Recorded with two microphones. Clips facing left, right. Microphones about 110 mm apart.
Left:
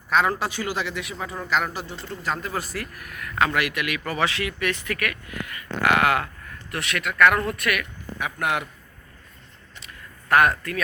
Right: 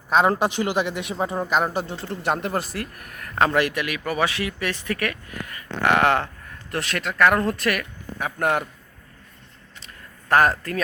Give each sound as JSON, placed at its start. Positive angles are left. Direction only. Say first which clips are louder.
{"t": 0.1, "sound": "speech", "louder": "right 3 dB", "side_deg": -20}
{"t": 1.5, "sound": "speech", "louder": "even", "side_deg": -20}
{"t": 2.2, "sound": "speech", "louder": "right 4 dB", "side_deg": -65}
{"t": 2.7, "sound": "speech", "louder": "right 1 dB", "side_deg": -45}
{"t": 9.8, "sound": "a sound", "louder": "left 1 dB", "side_deg": -35}